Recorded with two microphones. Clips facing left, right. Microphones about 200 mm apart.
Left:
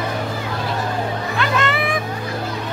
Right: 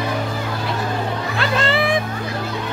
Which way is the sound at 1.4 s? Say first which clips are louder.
Right 1 dB; 30° right (ahead or behind).